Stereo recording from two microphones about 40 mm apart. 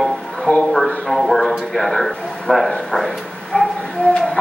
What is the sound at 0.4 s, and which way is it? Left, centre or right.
Music, centre.